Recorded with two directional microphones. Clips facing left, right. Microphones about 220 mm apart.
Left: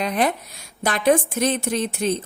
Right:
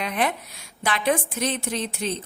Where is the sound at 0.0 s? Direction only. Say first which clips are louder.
Left 4 dB; 40° left (ahead or behind).